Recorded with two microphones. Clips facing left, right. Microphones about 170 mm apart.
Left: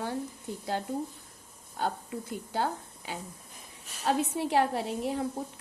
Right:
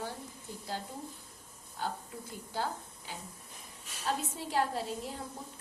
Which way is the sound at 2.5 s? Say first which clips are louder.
Left 5 dB; 65° left (ahead or behind).